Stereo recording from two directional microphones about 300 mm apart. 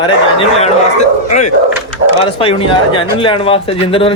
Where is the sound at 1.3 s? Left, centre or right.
Left.